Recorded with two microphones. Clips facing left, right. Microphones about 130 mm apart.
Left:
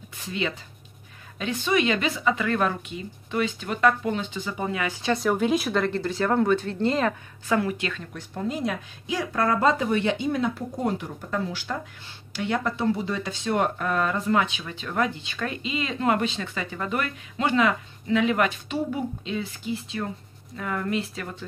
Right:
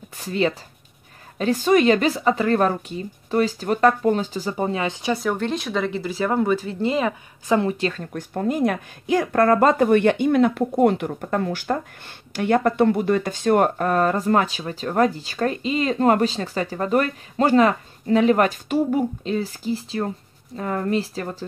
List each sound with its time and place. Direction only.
0.2 s speech: 40° right (ahead or behind)
5.0 s speech: centre (ahead or behind)
7.4 s a woman's voice: 25° right (ahead or behind)